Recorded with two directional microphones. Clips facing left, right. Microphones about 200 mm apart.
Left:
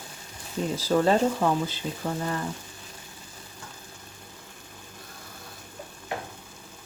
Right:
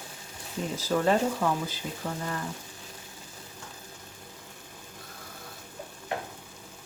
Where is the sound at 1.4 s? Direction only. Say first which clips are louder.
Left 3 dB; 25° left (ahead or behind).